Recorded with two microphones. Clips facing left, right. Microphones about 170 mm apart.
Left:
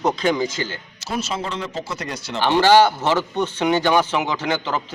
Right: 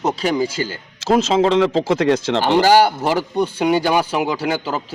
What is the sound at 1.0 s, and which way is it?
Speech, 90° right.